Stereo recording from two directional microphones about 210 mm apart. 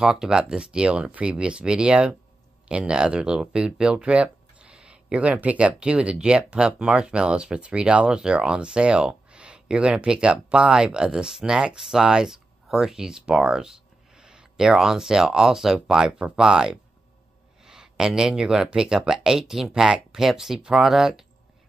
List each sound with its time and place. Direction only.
0.0 s speech: 5° right (ahead or behind)